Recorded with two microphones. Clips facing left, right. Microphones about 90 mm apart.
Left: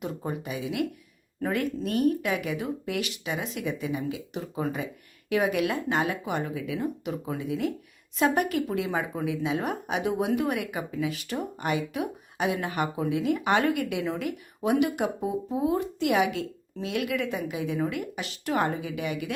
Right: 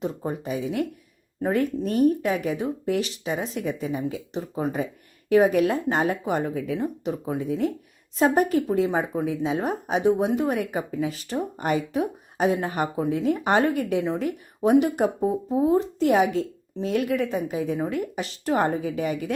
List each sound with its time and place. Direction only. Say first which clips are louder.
0.3 s speech: right 3 dB; 35° right (ahead or behind)